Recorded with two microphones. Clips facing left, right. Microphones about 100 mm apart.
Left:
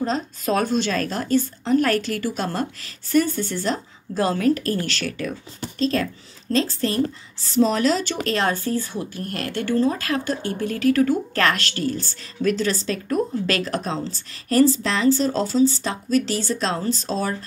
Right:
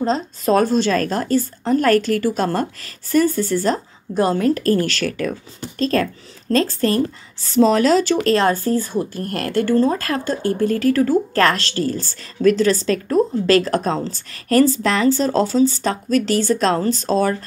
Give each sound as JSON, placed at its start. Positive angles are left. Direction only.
{"t": 0.0, "sound": "a woman's voice", "side_deg": -35}
{"t": 7.9, "sound": "a woman's voice", "side_deg": -40}